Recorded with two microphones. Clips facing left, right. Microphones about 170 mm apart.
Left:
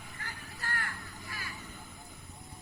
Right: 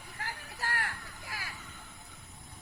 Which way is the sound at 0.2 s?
80° right.